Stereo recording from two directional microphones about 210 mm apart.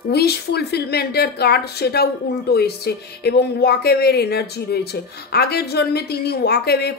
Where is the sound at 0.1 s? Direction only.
50° left (ahead or behind).